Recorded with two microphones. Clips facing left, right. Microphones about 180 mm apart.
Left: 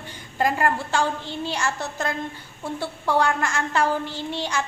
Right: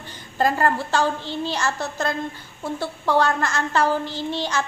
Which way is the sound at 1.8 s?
15° left (ahead or behind).